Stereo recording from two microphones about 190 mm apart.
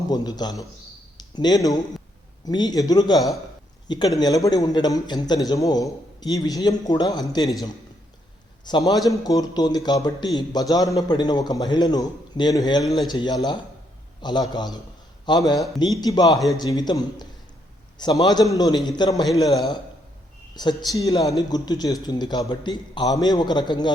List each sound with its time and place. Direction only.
0.1 s a man's voice: 20° left (ahead or behind)
8.6 s a man's voice: 20° left (ahead or behind)
12.8 s a man's voice: centre (ahead or behind)
13.1 s a man's voice: 20° left (ahead or behind)